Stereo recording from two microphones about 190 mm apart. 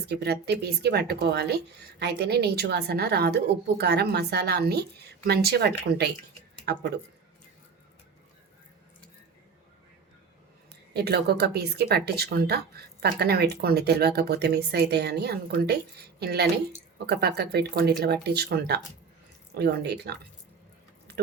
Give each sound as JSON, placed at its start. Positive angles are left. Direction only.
{"t": 0.0, "sound": "speech", "side_deg": -60}
{"t": 10.9, "sound": "speech", "side_deg": -55}